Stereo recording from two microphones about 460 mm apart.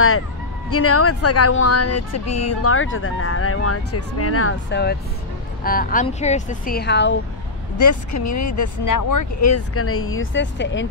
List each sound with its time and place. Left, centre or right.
0.7 s speech: left
7.7 s speech: left